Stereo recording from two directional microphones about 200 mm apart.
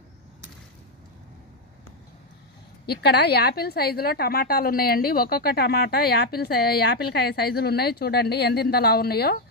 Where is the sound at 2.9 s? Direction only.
55° left (ahead or behind).